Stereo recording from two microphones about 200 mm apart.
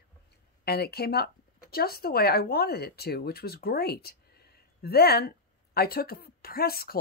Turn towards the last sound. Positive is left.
turn(degrees=50)  # may be behind; listen again after turning